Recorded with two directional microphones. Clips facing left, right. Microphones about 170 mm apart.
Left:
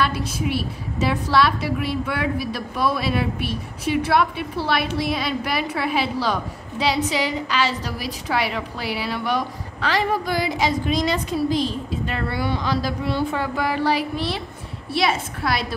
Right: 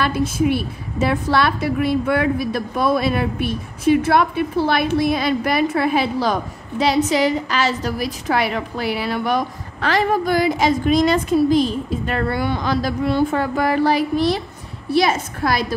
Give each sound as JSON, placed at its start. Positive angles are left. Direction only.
{"t": 0.0, "sound": "a woman's voice", "side_deg": -50}